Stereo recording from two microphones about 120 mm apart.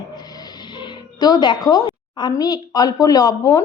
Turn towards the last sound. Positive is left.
turn(degrees=30)  # may be behind; listen again after turning